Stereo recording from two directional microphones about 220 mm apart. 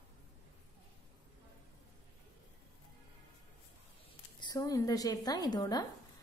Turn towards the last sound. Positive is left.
turn(degrees=20)  # may be behind; listen again after turning